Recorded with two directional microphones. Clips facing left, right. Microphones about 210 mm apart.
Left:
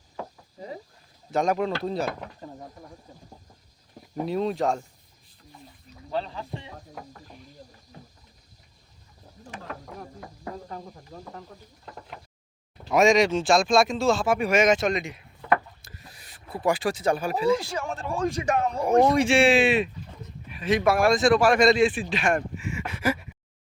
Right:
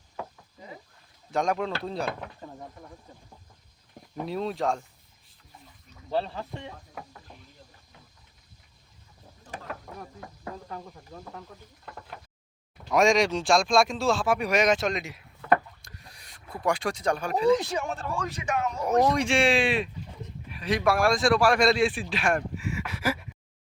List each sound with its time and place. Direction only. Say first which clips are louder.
0.6 s a sound: left 7 dB; 35° left (ahead or behind)
1.3 s speech: left 3 dB; 5° left (ahead or behind)
4.3 s speech: left 3 dB; centre (ahead or behind)
7.9 s a sound: left 9 dB; 40° left (ahead or behind)
10.7 s speech: left 1 dB; 5° left (ahead or behind)
12.9 s speech: left 3 dB; centre (ahead or behind)
15.8 s a sound: left 2 dB; 5° left (ahead or behind)
17.6 s a man's voice: right 2 dB; 20° right (ahead or behind)
17.8 s speech: left 1 dB; centre (ahead or behind)
18.2 s speech: left 7 dB; 40° left (ahead or behind)
19.1 s speech: left 4 dB; 5° left (ahead or behind)